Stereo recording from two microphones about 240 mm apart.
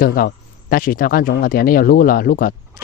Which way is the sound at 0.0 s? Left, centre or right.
Left.